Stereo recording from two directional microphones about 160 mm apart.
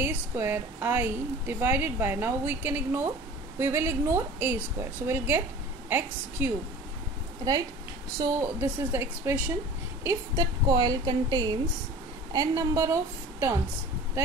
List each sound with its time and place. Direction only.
0.0 s a woman's voice: 15° right (ahead or behind)
8.2 s a woman's voice: 15° right (ahead or behind)